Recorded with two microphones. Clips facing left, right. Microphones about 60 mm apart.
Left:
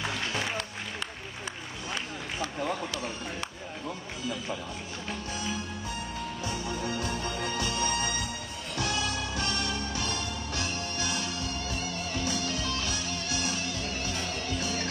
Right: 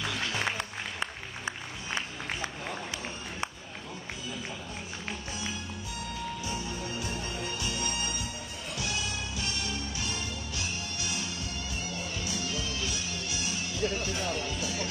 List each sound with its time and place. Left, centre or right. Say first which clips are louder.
0.0 s music: left 1 dB; left
6.4 s music: left 3 dB; left